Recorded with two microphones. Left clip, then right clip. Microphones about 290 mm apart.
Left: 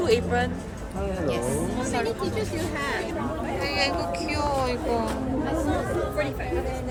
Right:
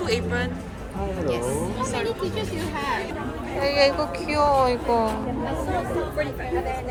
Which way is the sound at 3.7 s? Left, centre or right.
Centre.